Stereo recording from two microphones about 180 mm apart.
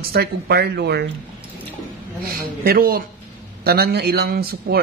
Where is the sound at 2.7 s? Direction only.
55° right (ahead or behind).